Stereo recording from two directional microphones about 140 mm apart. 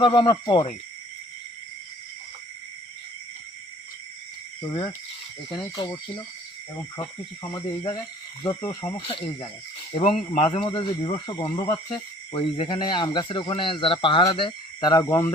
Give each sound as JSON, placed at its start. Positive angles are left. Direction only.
{"t": 0.0, "sound": "speech", "side_deg": 35}
{"t": 4.6, "sound": "speech", "side_deg": 40}
{"t": 5.7, "sound": "speech", "side_deg": 20}
{"t": 8.6, "sound": "speech", "side_deg": 30}
{"t": 10.7, "sound": "speech", "side_deg": 35}